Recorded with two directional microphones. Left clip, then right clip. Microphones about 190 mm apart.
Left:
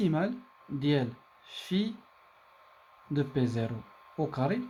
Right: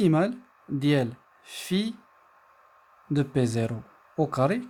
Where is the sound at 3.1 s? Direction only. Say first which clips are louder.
Right 5 dB; 50° right (ahead or behind).